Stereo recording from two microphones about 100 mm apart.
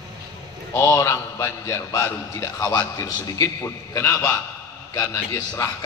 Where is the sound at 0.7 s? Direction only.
30° left (ahead or behind).